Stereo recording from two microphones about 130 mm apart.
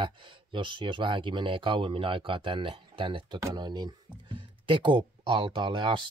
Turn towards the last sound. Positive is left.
turn(degrees=-40)  # may be behind; listen again after turning